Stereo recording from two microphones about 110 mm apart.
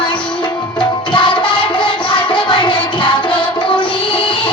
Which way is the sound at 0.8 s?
45° left (ahead or behind).